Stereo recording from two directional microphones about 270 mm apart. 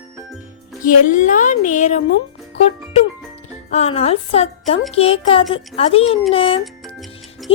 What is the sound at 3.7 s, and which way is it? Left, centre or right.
A woman's voice, left.